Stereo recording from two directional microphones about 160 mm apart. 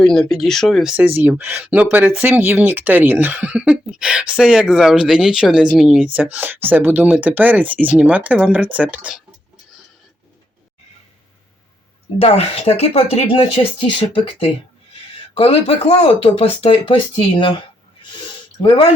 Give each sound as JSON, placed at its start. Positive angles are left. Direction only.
{"t": 0.0, "sound": "speech", "side_deg": 5}
{"t": 12.2, "sound": "speech", "side_deg": 40}